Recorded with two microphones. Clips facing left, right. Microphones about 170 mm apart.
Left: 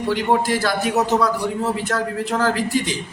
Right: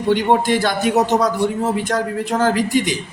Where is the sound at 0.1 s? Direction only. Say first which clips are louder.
Right 4 dB; 20° right (ahead or behind).